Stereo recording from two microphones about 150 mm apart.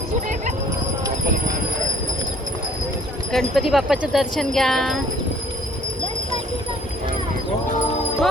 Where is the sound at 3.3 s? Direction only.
Centre (ahead or behind).